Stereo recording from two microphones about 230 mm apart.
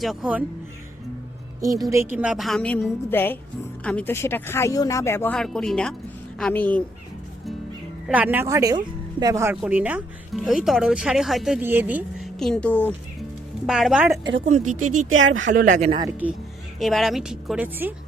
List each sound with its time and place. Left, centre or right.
0.0 s speech: centre
1.6 s speech: centre
8.0 s speech: centre
14.3 s speech: right
15.1 s speech: right
15.4 s speech: right
16.8 s speech: centre